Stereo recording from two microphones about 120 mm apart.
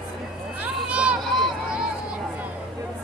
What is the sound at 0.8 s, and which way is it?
Run, 10° right (ahead or behind).